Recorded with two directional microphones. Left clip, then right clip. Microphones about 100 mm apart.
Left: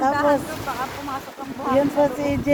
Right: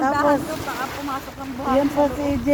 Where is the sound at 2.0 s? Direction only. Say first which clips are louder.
Left 1 dB; 55° left (ahead or behind).